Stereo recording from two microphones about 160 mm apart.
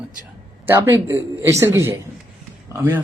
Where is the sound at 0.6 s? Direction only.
15° right (ahead or behind).